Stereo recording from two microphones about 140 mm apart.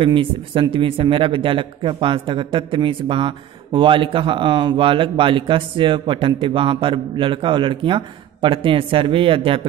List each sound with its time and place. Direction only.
0.0 s speech: 35° right (ahead or behind)